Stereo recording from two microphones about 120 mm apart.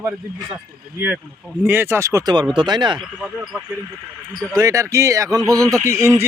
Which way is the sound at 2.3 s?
40° right (ahead or behind).